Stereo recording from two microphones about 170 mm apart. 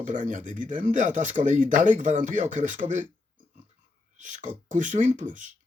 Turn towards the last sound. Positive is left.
turn(degrees=-50)  # may be behind; listen again after turning